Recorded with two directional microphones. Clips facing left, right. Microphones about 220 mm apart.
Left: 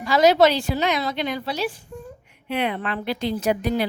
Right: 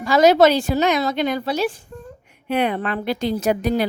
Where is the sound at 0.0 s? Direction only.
45° right (ahead or behind).